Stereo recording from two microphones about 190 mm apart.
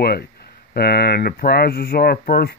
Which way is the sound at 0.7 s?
60° left (ahead or behind).